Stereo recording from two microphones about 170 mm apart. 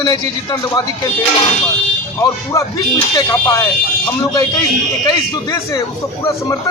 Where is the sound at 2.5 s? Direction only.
20° left (ahead or behind).